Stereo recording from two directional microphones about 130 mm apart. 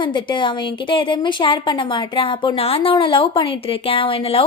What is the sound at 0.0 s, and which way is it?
Speech, 40° left (ahead or behind).